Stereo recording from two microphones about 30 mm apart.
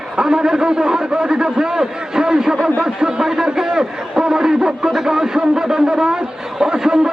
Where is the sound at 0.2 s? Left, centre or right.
Right.